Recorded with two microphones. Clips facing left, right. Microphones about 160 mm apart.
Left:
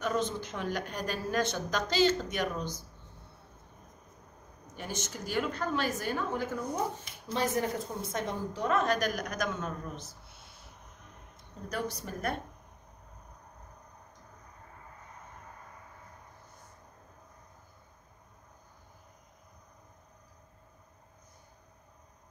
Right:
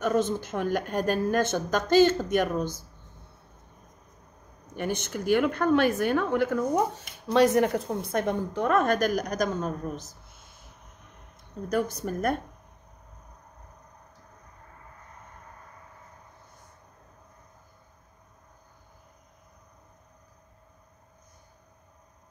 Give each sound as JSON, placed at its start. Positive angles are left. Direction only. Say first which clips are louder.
{"t": 0.0, "sound": "a woman's voice", "louder": "right 6 dB", "side_deg": -50}
{"t": 4.7, "sound": "a woman's voice", "louder": "right 8 dB", "side_deg": -60}
{"t": 11.7, "sound": "a woman's voice", "louder": "right 8 dB", "side_deg": -45}